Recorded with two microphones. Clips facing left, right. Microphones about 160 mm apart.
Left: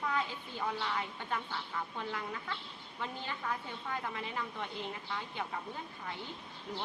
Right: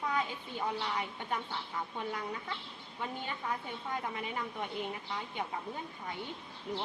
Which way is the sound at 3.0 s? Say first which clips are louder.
Right 1 dB; 20° right (ahead or behind).